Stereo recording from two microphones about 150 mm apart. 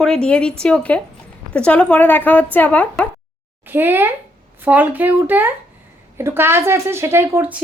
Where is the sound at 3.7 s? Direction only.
15° right (ahead or behind).